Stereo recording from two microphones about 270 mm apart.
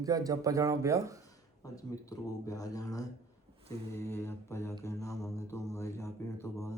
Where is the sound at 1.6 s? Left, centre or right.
Centre.